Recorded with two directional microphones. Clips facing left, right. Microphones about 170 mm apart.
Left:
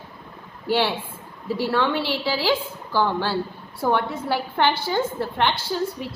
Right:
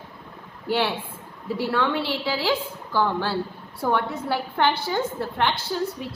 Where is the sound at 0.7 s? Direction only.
30° left (ahead or behind).